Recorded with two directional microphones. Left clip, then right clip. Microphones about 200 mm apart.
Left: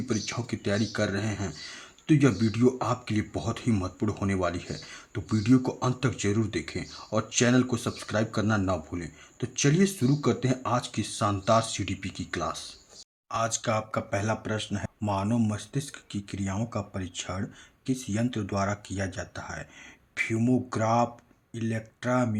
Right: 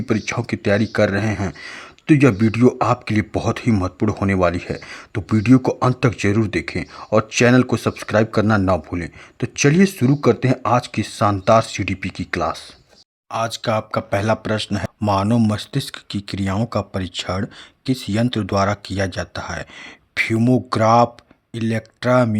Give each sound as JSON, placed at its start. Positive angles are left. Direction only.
{"t": 0.1, "sound": "speech", "side_deg": -40}
{"t": 13.3, "sound": "speech", "side_deg": -30}